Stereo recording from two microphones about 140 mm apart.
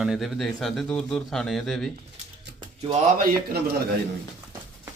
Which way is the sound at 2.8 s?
50° right (ahead or behind).